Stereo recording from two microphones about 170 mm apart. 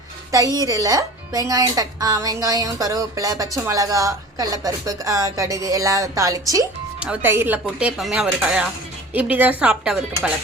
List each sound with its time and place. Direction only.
0.3 s speech: 20° right (ahead or behind)
7.0 s speech: 10° right (ahead or behind)